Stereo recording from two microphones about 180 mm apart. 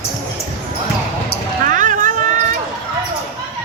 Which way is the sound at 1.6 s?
45° right (ahead or behind).